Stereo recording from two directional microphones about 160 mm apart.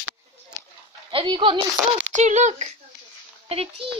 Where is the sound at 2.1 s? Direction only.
50° right (ahead or behind).